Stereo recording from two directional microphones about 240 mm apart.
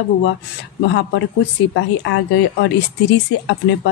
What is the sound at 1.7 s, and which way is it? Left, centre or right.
Speech, left.